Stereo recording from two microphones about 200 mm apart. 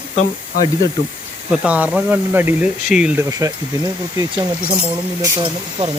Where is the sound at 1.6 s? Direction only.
5° right (ahead or behind).